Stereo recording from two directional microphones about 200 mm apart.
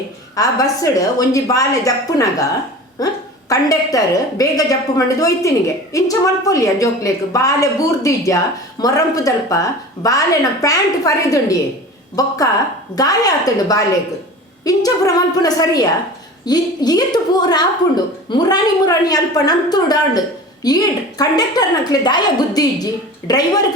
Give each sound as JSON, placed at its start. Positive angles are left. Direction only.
{"t": 0.3, "sound": "a woman's voice", "side_deg": 15}
{"t": 3.5, "sound": "a woman's voice", "side_deg": 15}